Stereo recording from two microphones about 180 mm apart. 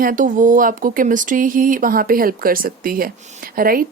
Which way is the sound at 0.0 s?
50° right (ahead or behind).